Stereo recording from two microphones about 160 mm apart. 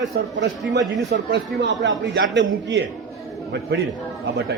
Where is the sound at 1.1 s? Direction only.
90° right.